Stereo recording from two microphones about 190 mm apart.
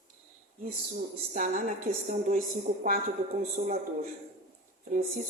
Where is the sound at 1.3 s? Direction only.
40° right (ahead or behind).